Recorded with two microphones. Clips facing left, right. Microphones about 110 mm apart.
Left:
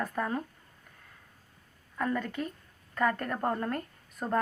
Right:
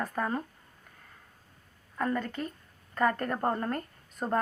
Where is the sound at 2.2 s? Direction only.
5° left (ahead or behind).